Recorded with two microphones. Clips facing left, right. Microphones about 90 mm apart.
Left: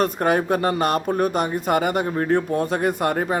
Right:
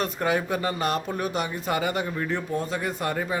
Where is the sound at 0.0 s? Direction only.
45° left (ahead or behind).